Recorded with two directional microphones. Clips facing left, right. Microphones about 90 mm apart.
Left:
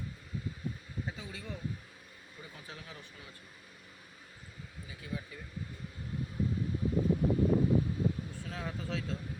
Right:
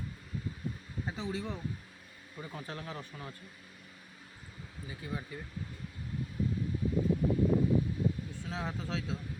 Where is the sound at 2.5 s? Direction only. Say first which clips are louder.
Right 9 dB; 50° right (ahead or behind).